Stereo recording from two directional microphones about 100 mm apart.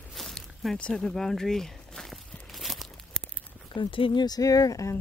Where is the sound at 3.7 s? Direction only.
55° left (ahead or behind).